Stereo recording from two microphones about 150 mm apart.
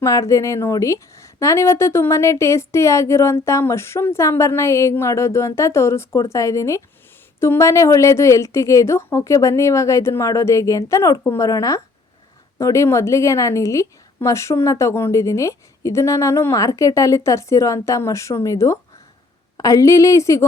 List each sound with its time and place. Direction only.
0.0 s a woman's voice: 20° left (ahead or behind)